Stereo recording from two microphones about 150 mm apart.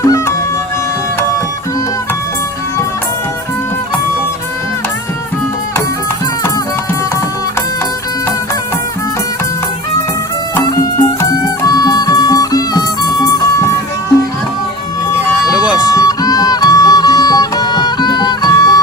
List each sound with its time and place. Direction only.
0.0 s music: 20° left (ahead or behind)
10.5 s music: 20° left (ahead or behind)
15.5 s music: 5° right (ahead or behind)
15.9 s music: 25° left (ahead or behind)